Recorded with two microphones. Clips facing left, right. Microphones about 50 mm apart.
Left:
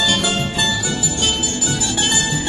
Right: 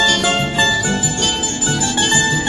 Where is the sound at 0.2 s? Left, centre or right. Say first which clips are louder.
Right 4 dB; right.